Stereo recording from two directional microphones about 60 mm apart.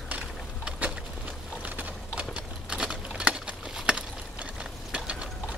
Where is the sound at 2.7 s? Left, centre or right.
Centre.